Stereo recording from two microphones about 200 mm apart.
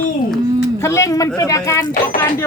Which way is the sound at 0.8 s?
15° left (ahead or behind).